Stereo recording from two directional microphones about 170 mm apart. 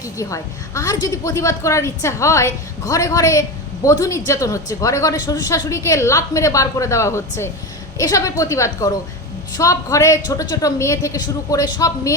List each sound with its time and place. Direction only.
0.0 s a woman's voice: 20° left (ahead or behind)